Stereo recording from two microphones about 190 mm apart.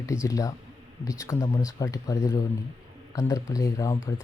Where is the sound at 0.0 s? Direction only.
15° left (ahead or behind).